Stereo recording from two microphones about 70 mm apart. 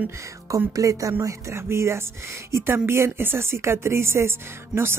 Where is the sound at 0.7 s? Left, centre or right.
Right.